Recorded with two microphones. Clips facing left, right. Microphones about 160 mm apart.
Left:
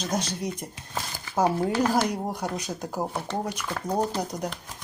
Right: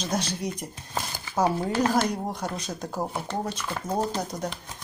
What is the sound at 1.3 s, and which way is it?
Speech, 15° left (ahead or behind).